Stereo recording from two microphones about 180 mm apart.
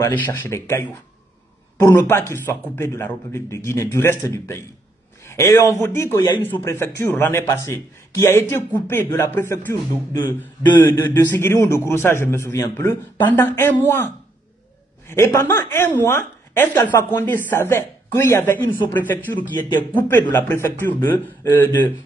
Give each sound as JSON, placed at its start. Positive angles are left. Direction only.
{"t": 0.0, "sound": "a man's voice", "side_deg": 15}
{"t": 10.8, "sound": "a man's voice", "side_deg": 10}